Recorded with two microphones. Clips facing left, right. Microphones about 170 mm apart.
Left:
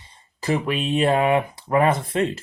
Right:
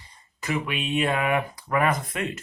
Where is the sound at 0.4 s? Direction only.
35° left (ahead or behind).